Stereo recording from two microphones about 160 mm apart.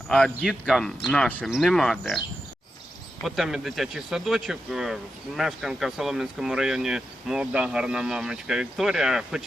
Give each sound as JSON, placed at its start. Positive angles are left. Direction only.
{"t": 0.1, "sound": "speech", "side_deg": 5}
{"t": 3.2, "sound": "speech", "side_deg": 0}